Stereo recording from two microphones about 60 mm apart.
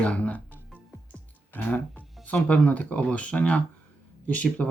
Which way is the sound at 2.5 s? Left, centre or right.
Left.